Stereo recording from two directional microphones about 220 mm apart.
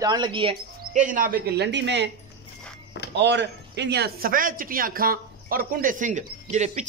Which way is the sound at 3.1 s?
50° right (ahead or behind).